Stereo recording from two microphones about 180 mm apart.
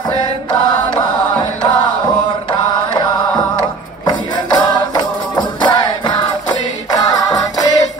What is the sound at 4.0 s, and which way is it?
Music, 25° left (ahead or behind).